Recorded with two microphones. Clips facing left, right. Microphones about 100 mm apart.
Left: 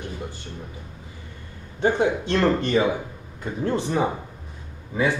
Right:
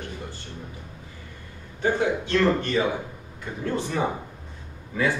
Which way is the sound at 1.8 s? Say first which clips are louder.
Left 3 dB; 25° left (ahead or behind).